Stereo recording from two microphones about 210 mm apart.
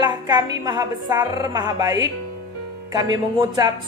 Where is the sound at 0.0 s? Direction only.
20° right (ahead or behind).